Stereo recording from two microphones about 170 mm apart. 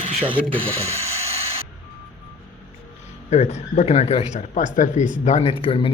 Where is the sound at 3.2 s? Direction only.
40° left (ahead or behind).